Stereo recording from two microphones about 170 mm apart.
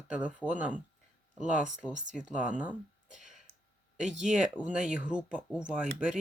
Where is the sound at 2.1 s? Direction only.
5° right (ahead or behind).